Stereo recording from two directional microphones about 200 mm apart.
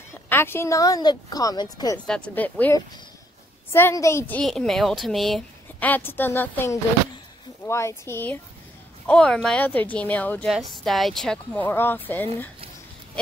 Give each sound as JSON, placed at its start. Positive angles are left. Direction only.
{"t": 0.3, "sound": "a woman's voice", "side_deg": 10}
{"t": 2.0, "sound": "a woman's voice", "side_deg": 5}